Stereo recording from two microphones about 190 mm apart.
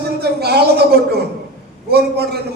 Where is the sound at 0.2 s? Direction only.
55° right (ahead or behind).